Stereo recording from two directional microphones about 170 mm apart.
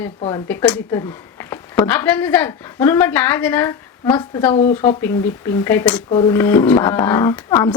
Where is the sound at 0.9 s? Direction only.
15° left (ahead or behind).